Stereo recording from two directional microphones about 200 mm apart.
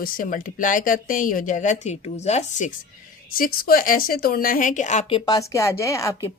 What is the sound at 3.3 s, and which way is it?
Speech, 45° left (ahead or behind).